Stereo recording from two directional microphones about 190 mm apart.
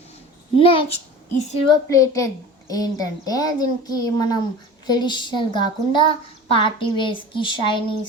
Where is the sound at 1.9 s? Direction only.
15° left (ahead or behind).